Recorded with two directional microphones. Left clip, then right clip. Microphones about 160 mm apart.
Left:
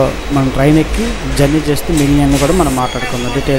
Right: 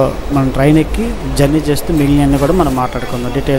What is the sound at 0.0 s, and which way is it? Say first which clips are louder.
Speech: even; centre (ahead or behind).